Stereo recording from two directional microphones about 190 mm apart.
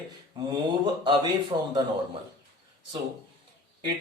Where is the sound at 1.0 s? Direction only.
25° right (ahead or behind).